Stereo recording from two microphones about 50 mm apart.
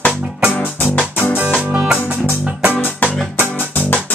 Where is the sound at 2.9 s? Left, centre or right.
Left.